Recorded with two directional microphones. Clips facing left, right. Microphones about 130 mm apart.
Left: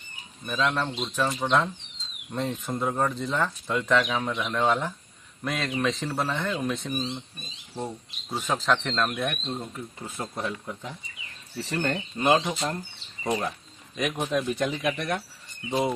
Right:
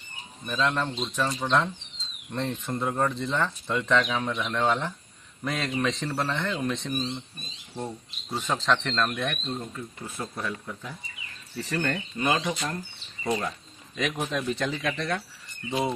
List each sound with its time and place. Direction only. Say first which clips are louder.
0.5 s speech: even; 5° left (ahead or behind); by 12.0 s 20° left (ahead or behind)
12.2 s speech: left 4 dB; 35° left (ahead or behind)
13.2 s speech: left 1 dB; 15° left (ahead or behind)